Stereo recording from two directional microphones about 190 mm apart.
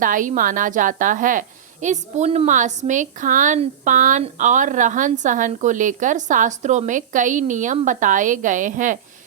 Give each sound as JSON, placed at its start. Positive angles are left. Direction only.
{"t": 0.0, "sound": "a woman's voice", "side_deg": -45}